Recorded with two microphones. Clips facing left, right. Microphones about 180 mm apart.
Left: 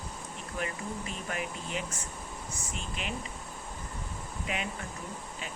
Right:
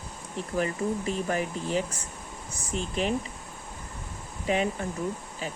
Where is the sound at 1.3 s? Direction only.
35° right (ahead or behind).